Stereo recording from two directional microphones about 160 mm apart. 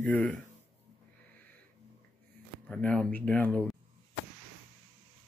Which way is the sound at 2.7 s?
10° left (ahead or behind).